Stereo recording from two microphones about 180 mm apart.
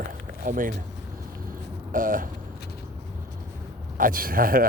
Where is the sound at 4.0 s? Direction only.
50° right (ahead or behind).